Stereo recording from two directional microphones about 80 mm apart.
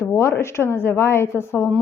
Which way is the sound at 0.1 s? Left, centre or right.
Left.